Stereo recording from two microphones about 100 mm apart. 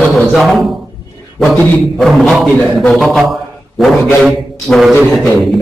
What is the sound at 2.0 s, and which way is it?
A man's voice, centre (ahead or behind).